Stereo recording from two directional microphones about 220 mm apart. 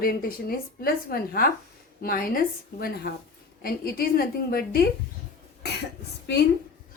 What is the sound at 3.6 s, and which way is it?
A woman's voice, 40° left (ahead or behind).